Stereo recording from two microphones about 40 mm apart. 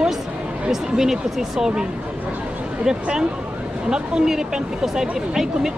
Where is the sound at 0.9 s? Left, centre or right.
Centre.